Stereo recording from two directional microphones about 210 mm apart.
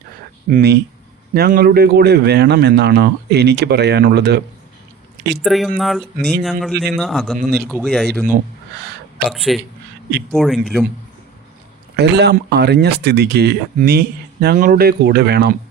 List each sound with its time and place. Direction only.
0.4 s a man's voice: 45° right (ahead or behind)
5.4 s speech: centre (ahead or behind)
9.3 s speech: centre (ahead or behind)
11.9 s a man's voice: 55° right (ahead or behind)